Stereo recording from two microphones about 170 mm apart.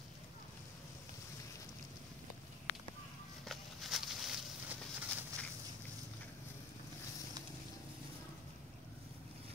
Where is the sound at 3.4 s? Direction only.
Centre (ahead or behind).